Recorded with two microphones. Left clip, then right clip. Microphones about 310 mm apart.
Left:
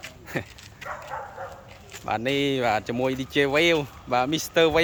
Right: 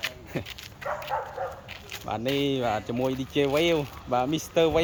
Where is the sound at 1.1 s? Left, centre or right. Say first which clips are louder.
Right 4 dB; right.